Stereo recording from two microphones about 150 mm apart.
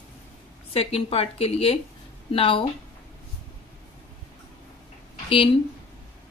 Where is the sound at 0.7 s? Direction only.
40° left (ahead or behind).